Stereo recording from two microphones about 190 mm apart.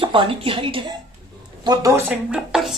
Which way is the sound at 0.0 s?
25° right (ahead or behind).